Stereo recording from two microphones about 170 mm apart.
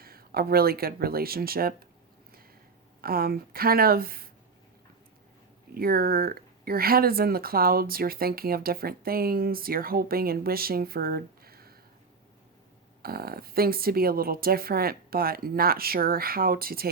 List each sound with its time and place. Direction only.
0.0 s speech: 60° right (ahead or behind)
3.0 s speech: 60° right (ahead or behind)
5.7 s speech: 60° right (ahead or behind)
13.0 s speech: 65° right (ahead or behind)